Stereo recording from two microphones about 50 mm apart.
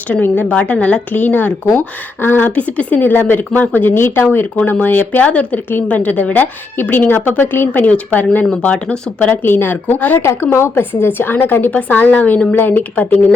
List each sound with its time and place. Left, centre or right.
0.1 s a woman's voice: left
2.6 s a woman's voice: left
3.1 s a woman's voice: left
3.9 s a woman's voice: left
5.2 s a woman's voice: left
8.6 s a woman's voice: left
9.4 s a woman's voice: left
10.2 s a woman's voice: left
11.7 s a woman's voice: left